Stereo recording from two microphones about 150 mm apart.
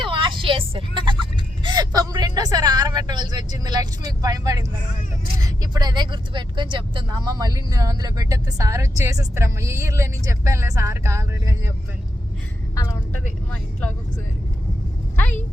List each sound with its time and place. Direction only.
0.0 s vehicle: 35° right (ahead or behind)
5.4 s speech: 25° right (ahead or behind)
13.1 s speech: 10° left (ahead or behind)